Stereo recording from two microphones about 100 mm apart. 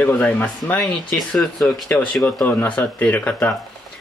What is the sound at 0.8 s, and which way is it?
Speech, 5° left (ahead or behind).